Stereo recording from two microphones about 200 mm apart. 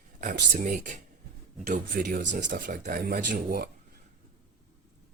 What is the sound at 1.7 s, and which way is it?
Speech, 50° right (ahead or behind).